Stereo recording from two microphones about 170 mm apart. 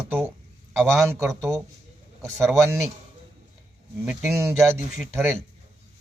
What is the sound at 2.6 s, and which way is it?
Speech, 15° right (ahead or behind).